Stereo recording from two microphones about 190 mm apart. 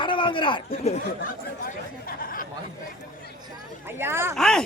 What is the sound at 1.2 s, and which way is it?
Speech, 45° left (ahead or behind).